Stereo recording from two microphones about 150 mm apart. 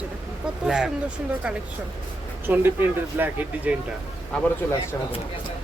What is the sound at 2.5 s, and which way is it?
A woman's voice, 15° right (ahead or behind).